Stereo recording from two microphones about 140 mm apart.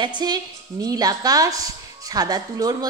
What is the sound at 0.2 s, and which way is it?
A woman's voice, 30° right (ahead or behind).